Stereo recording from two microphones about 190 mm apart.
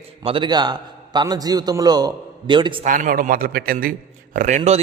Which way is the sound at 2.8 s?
45° right (ahead or behind).